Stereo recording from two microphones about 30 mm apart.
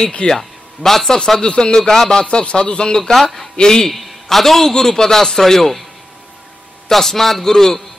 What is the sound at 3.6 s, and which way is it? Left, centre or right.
Speech, left.